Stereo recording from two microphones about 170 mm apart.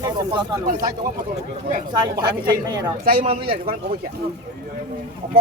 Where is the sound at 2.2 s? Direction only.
25° right (ahead or behind).